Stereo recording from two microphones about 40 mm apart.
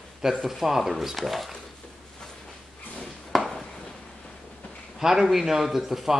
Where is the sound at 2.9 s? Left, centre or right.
Centre.